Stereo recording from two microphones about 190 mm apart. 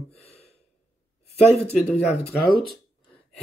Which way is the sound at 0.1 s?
35° left (ahead or behind).